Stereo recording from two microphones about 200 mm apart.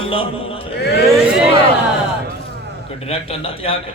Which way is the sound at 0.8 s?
55° left (ahead or behind).